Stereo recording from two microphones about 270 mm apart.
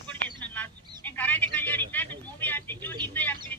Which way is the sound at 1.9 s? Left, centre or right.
Centre.